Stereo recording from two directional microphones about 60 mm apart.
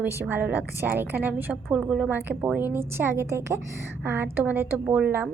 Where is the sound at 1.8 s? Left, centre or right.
Centre.